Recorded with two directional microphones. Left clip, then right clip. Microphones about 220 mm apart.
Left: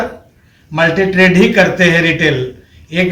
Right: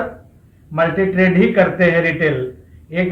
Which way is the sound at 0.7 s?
15° left (ahead or behind).